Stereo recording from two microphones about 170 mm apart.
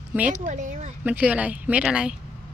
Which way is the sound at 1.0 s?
10° right (ahead or behind).